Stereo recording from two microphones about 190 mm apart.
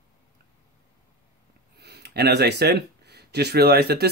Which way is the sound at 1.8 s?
60° right (ahead or behind).